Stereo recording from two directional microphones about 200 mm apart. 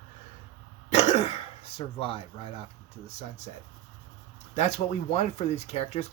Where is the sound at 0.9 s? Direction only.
35° left (ahead or behind).